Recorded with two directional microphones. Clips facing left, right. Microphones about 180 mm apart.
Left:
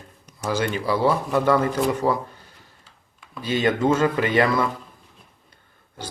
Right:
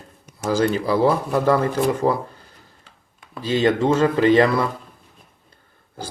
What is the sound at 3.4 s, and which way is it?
Speech, 35° right (ahead or behind).